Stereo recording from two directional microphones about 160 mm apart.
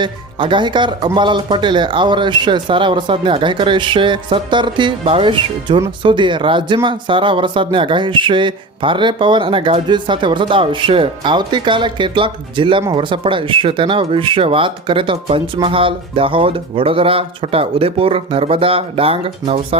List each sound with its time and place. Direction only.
0.0 s speech: 30° right (ahead or behind)